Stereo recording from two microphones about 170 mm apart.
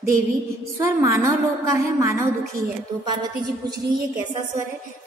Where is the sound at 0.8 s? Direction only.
15° right (ahead or behind).